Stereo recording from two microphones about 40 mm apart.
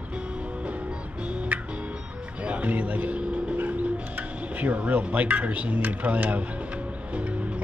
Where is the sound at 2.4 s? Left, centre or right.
Right.